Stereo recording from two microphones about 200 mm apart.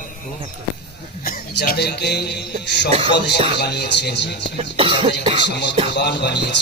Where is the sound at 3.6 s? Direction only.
55° left (ahead or behind).